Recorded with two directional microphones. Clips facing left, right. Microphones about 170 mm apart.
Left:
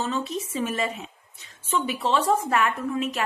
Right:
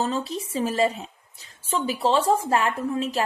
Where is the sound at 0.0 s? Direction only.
35° right (ahead or behind).